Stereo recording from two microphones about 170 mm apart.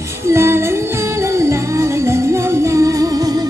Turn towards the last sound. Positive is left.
turn(degrees=-20)  # may be behind; listen again after turning